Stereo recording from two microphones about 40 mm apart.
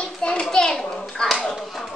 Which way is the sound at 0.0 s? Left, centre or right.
Left.